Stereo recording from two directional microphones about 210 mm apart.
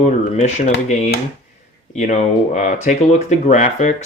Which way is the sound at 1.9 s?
35° left (ahead or behind).